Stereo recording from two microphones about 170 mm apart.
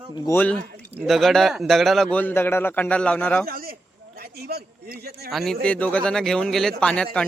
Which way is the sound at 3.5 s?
60° right (ahead or behind).